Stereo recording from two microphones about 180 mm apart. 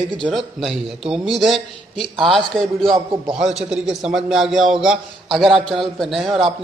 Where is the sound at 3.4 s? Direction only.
5° right (ahead or behind).